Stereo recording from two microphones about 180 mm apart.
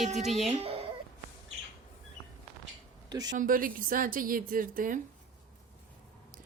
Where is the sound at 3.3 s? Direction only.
50° right (ahead or behind).